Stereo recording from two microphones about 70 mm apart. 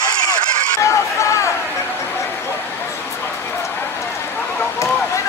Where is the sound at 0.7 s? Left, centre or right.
Left.